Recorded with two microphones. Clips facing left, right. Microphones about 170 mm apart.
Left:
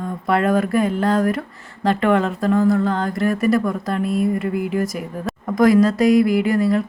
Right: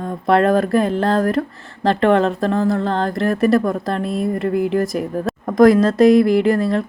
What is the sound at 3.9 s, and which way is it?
Speech, 25° right (ahead or behind).